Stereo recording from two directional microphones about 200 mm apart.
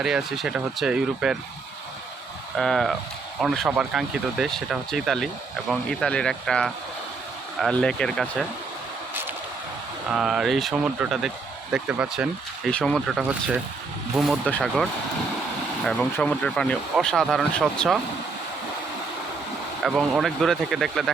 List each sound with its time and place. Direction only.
0.0 s speech: centre (ahead or behind)
2.6 s speech: centre (ahead or behind)
10.1 s speech: 5° right (ahead or behind)
15.9 s speech: 5° left (ahead or behind)
19.8 s speech: centre (ahead or behind)